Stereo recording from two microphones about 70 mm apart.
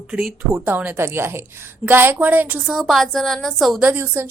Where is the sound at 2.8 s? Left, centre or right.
Centre.